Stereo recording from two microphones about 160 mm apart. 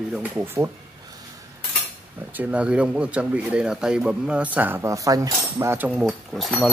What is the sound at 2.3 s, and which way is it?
Speech, 10° right (ahead or behind).